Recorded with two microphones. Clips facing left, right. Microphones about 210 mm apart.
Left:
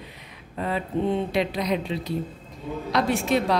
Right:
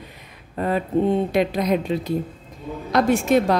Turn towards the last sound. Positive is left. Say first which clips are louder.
# right 5 dB
turn(degrees=-45)  # may be behind; listen again after turning